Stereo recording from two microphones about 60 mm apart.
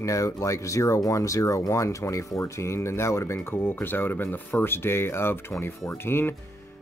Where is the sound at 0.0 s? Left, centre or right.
Left.